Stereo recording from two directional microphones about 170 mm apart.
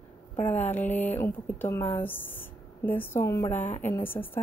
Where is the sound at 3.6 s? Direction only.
45° left (ahead or behind).